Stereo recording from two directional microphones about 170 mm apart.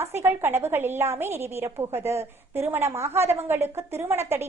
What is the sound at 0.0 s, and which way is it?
A woman's voice, 15° right (ahead or behind).